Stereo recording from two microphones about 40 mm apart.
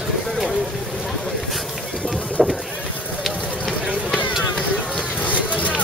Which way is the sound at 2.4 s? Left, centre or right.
Centre.